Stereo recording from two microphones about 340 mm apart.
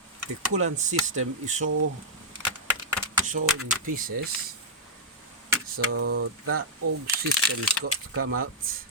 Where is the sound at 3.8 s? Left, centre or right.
Right.